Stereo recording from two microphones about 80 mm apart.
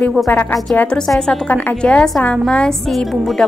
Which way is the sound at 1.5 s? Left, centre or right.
Left.